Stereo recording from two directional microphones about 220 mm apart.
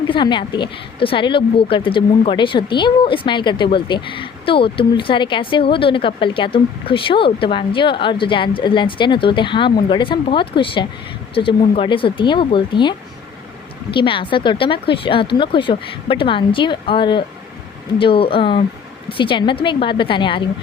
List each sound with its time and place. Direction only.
0.1 s speech: 20° left (ahead or behind)